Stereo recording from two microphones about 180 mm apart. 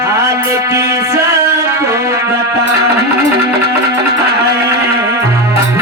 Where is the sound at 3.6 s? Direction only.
65° right (ahead or behind).